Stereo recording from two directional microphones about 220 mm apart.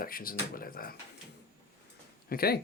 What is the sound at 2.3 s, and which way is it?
Speech, 45° left (ahead or behind).